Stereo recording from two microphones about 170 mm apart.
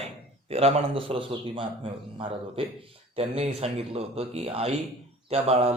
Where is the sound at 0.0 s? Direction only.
35° right (ahead or behind).